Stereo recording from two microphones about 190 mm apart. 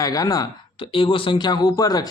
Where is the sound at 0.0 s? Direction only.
20° left (ahead or behind).